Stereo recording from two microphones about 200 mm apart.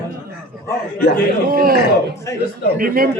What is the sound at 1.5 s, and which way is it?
Speech, 45° right (ahead or behind).